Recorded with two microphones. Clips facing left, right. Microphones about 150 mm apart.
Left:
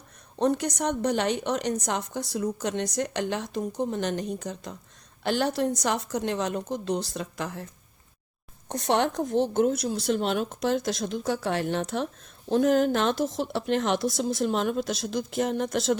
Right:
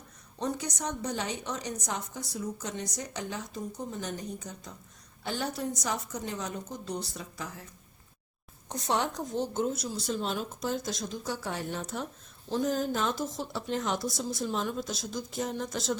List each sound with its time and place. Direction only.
0.3 s a woman's voice: 65° left (ahead or behind)
8.7 s a woman's voice: 70° left (ahead or behind)